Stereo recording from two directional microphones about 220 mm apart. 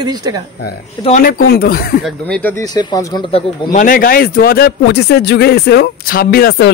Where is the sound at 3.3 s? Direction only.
35° left (ahead or behind).